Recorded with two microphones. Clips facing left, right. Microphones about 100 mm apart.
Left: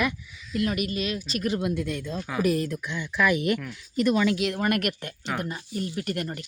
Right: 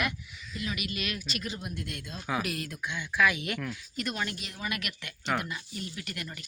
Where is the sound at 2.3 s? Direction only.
5° right (ahead or behind).